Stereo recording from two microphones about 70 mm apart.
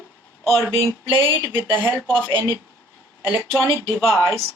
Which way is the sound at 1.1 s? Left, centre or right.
Right.